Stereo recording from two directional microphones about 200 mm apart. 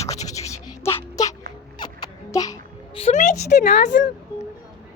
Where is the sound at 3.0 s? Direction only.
35° left (ahead or behind).